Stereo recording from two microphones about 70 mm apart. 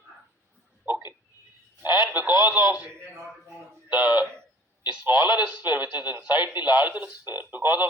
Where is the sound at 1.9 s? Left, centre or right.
Left.